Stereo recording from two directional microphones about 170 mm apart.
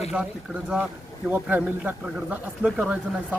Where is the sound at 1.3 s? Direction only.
10° right (ahead or behind).